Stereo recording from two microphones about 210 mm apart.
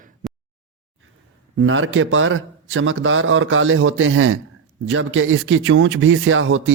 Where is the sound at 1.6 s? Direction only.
70° right (ahead or behind).